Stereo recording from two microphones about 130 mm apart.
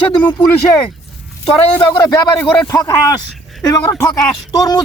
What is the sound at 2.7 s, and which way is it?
Speech, 25° left (ahead or behind).